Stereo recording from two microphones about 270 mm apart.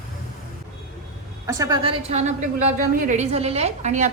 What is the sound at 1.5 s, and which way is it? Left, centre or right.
A woman's voice, centre.